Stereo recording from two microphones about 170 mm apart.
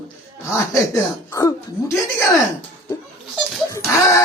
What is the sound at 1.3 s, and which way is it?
Speech, 20° left (ahead or behind).